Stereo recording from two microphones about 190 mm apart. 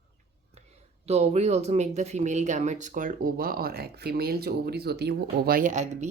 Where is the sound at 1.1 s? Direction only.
35° right (ahead or behind).